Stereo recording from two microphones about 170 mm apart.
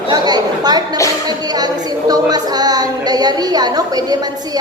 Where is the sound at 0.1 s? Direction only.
25° right (ahead or behind).